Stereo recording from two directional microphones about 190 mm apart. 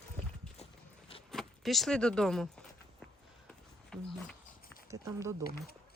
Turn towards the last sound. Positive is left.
turn(degrees=-15)  # may be behind; listen again after turning